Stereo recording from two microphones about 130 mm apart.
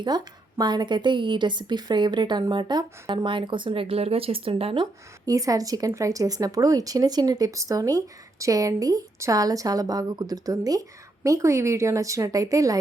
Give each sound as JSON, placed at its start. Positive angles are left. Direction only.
{"t": 0.0, "sound": "a woman's voice", "side_deg": -35}
{"t": 4.8, "sound": "a woman's voice", "side_deg": -25}